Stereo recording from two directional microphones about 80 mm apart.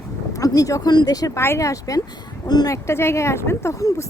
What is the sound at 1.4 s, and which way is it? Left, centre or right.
Speech, left.